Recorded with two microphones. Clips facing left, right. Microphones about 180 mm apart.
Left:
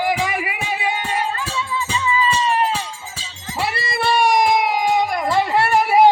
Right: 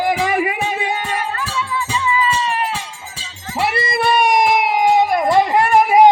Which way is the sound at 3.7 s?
20° right (ahead or behind).